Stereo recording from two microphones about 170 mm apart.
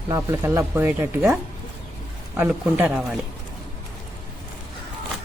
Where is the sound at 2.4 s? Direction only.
10° right (ahead or behind).